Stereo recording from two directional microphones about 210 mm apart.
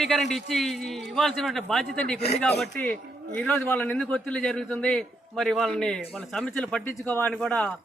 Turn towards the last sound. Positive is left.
turn(degrees=5)  # may be behind; listen again after turning